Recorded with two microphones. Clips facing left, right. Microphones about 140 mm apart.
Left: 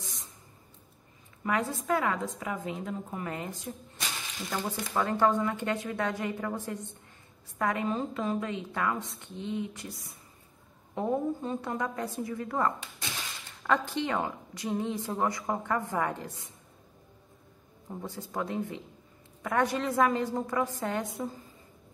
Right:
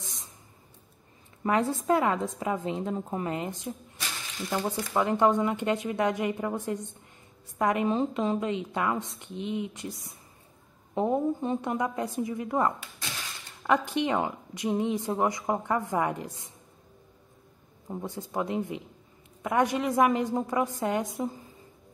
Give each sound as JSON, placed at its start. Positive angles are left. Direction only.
{"t": 1.4, "sound": "a woman's voice", "side_deg": -25}
{"t": 17.8, "sound": "a woman's voice", "side_deg": -20}